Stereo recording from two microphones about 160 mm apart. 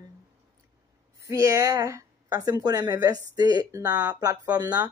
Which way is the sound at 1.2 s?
20° right (ahead or behind).